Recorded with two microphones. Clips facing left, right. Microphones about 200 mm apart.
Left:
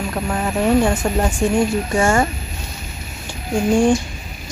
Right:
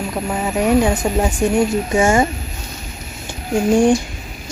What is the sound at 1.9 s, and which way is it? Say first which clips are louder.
Speech: right 2 dB; 20° right (ahead or behind).